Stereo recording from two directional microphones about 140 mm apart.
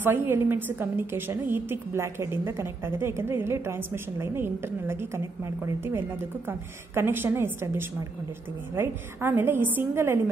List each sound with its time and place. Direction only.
0.0 s a woman's voice: 15° right (ahead or behind)